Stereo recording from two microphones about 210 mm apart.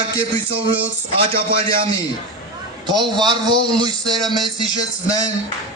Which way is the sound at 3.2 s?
20° right (ahead or behind).